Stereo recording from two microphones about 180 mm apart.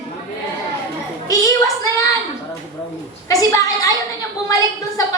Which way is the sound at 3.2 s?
20° left (ahead or behind).